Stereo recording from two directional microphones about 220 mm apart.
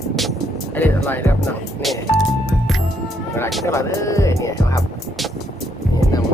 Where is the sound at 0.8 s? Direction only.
10° left (ahead or behind).